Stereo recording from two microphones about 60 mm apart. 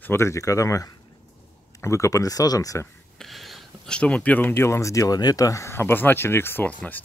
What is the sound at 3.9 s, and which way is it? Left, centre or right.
Speech, centre.